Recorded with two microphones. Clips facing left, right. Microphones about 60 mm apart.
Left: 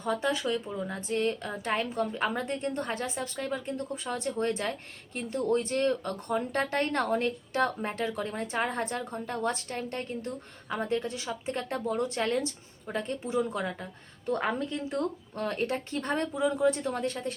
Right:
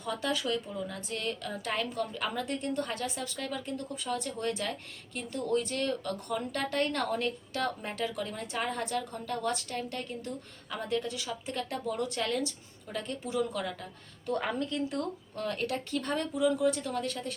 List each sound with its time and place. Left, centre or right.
0.2 s a woman's voice: left